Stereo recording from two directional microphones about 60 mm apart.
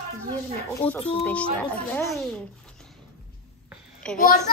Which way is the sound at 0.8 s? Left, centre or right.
Left.